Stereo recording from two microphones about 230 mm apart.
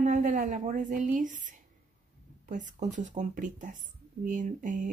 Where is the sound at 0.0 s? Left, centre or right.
Right.